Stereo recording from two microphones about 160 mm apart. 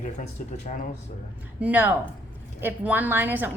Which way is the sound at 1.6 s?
10° right (ahead or behind).